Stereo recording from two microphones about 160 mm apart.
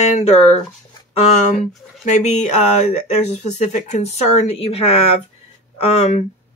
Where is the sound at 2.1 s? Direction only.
45° left (ahead or behind).